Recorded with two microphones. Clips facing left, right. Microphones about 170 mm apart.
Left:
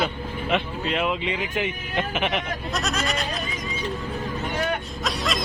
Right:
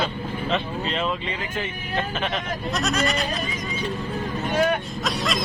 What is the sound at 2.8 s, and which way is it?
Snicker, centre (ahead or behind).